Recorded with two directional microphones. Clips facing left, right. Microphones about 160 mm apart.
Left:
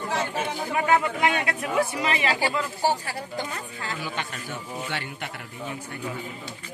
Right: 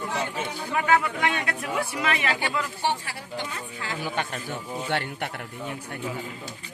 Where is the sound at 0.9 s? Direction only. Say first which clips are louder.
Left 2 dB; 25° left (ahead or behind); by 3.9 s 40° left (ahead or behind).